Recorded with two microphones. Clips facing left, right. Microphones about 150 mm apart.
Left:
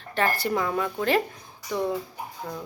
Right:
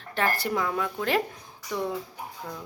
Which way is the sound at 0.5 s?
Centre (ahead or behind).